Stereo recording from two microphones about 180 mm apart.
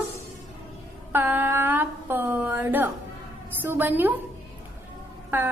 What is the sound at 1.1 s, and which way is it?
A woman's voice, 10° right (ahead or behind).